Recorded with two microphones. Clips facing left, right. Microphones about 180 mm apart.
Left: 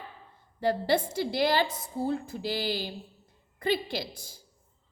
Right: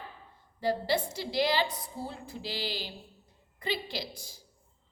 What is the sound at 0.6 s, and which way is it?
A woman's voice, 55° left (ahead or behind).